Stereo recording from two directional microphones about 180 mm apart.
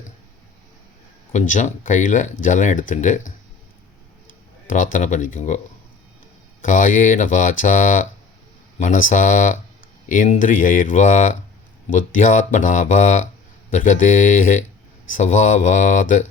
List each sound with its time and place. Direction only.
1.3 s speech: 45° left (ahead or behind)
4.7 s speech: 45° left (ahead or behind)
6.6 s speech: 45° left (ahead or behind)